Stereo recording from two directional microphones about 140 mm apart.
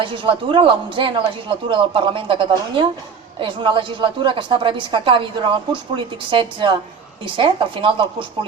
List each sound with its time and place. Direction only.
0.0 s speech: 40° right (ahead or behind)